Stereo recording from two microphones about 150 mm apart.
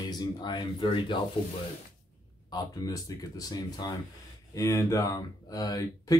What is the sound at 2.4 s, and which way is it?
Speech, 25° left (ahead or behind).